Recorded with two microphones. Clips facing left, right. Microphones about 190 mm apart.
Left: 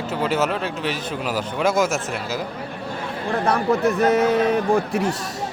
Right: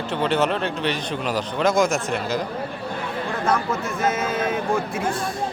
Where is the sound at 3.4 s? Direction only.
35° left (ahead or behind).